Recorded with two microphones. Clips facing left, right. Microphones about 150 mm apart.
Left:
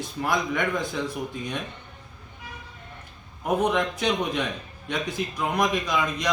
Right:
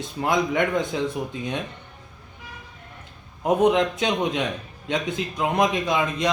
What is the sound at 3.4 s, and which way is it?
Speech, 20° right (ahead or behind).